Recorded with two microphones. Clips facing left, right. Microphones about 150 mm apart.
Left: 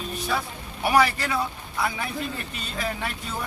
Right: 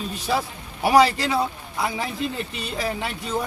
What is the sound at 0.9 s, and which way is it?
Speech, 30° right (ahead or behind).